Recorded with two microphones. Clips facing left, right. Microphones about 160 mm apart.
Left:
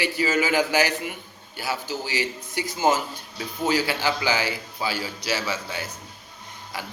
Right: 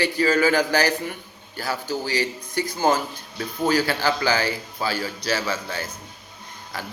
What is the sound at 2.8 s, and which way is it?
A man's voice, 20° left (ahead or behind).